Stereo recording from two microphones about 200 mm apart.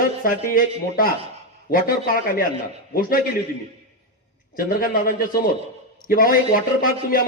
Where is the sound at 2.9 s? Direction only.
45° left (ahead or behind).